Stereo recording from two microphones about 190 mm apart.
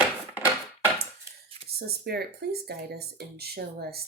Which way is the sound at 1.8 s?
55° right (ahead or behind).